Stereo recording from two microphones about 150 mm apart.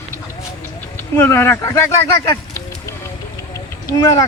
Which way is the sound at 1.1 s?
15° left (ahead or behind).